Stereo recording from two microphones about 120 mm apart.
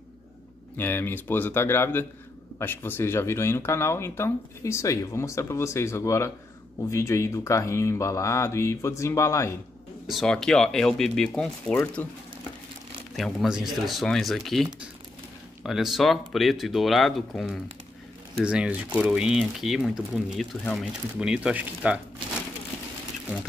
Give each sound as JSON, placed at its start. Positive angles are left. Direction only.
{"t": 0.7, "sound": "speech", "side_deg": 20}
{"t": 10.0, "sound": "speech", "side_deg": 0}
{"t": 13.1, "sound": "speech", "side_deg": 0}
{"t": 18.4, "sound": "speech", "side_deg": -10}